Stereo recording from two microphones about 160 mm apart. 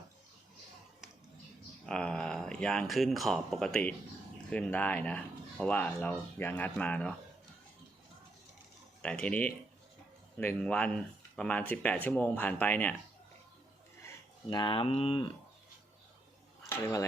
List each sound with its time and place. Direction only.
1.9 s speech: 5° left (ahead or behind)
9.0 s speech: 10° left (ahead or behind)
14.4 s speech: 30° left (ahead or behind)
16.6 s speech: 15° left (ahead or behind)